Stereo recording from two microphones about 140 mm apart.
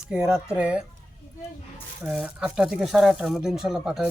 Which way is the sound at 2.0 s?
5° right (ahead or behind).